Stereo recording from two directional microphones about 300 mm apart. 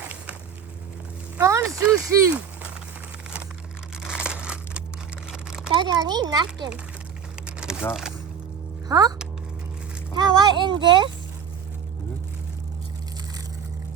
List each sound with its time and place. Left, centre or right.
1.5 s a sound: centre
4.0 s crumpling: centre
5.3 s a sound: centre
5.7 s speech: centre
7.4 s speech: centre
8.9 s speech: centre